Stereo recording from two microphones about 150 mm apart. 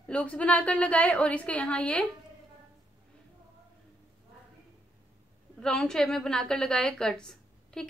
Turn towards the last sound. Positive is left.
turn(degrees=5)  # may be behind; listen again after turning